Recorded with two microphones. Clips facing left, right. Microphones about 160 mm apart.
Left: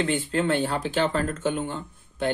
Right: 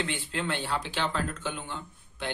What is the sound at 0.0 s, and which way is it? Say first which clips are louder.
Speech: left 8 dB; 50° left (ahead or behind).